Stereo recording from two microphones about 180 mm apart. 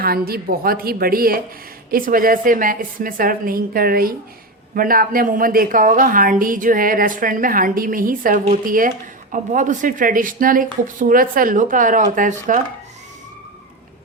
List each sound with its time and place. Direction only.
0.0 s a woman's voice: 55° right (ahead or behind)